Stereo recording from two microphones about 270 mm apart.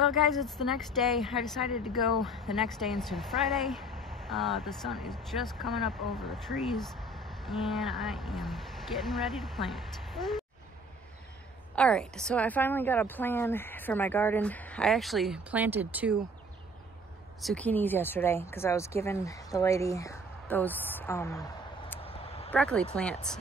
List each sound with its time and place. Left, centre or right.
0.0 s speech: centre
11.7 s speech: centre
17.4 s speech: centre
22.0 s a sound: left
22.5 s speech: centre